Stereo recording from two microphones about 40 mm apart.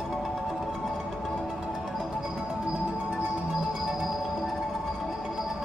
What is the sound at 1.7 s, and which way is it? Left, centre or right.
Music, centre.